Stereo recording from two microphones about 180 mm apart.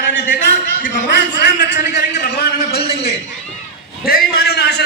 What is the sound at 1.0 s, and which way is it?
A man's voice, 70° left (ahead or behind).